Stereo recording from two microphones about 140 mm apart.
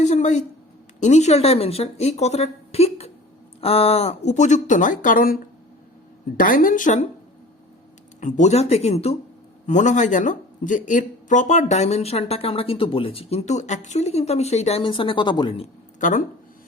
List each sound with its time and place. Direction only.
0.0 s a sound: 55° left (ahead or behind)
0.9 s a woman's voice: 60° left (ahead or behind)
8.2 s speech: 60° left (ahead or behind)
9.6 s speech: 60° left (ahead or behind); by 15.6 s 35° left (ahead or behind)
16.0 s speech: 65° left (ahead or behind)